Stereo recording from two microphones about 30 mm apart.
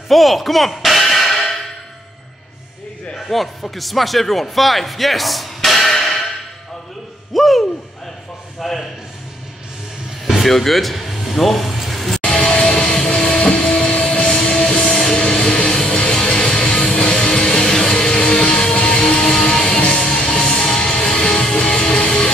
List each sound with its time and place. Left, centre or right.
0.1 s music: centre
3.2 s a sound: centre
3.7 s speech: centre
7.3 s a sound: centre
8.5 s a man's voice: centre
10.4 s music: centre
12.3 s music: left
13.4 s a sound: left
13.7 s music: left